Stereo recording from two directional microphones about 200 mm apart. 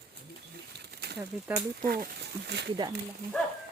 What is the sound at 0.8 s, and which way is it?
Bird, 55° right (ahead or behind).